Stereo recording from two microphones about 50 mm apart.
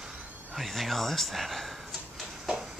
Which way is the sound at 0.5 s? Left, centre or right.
Centre.